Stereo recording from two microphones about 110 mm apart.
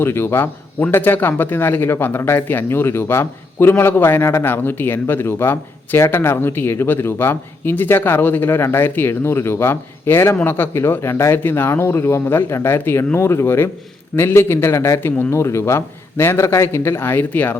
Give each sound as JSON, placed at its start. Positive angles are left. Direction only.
{"t": 0.0, "sound": "a man's voice", "side_deg": 20}